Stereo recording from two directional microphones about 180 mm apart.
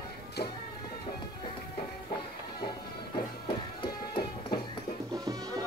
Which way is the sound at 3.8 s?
25° left (ahead or behind).